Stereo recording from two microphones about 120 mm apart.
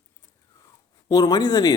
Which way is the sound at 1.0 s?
30° left (ahead or behind).